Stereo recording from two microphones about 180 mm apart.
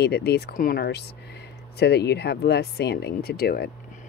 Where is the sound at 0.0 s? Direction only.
65° left (ahead or behind).